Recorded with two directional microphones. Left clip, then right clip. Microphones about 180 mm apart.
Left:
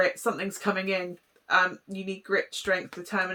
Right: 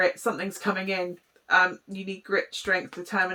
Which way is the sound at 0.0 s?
25° left (ahead or behind).